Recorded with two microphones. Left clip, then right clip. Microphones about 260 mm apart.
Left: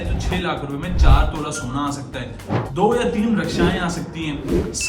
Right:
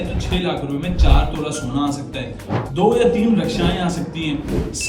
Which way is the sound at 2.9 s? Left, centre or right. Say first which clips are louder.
Right 4 dB; centre.